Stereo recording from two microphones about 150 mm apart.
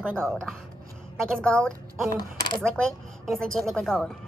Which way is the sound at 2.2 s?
30° left (ahead or behind).